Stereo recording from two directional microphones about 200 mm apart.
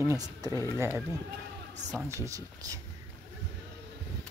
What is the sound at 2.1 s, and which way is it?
Speech, 15° right (ahead or behind).